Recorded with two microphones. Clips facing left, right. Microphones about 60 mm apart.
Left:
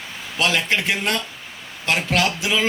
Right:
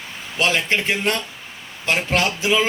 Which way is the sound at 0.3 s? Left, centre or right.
Right.